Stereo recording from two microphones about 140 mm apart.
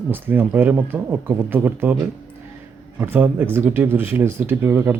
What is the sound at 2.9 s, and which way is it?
Speech, 15° right (ahead or behind).